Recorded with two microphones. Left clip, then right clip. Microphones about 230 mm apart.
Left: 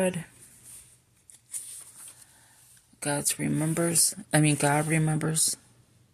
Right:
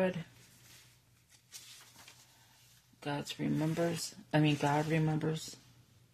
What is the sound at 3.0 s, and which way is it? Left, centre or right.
Speech, left.